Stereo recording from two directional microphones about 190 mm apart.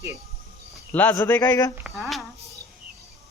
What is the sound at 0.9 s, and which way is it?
Speech, 10° left (ahead or behind).